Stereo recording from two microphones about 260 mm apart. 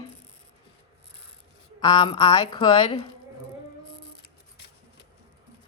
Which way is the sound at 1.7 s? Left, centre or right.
Centre.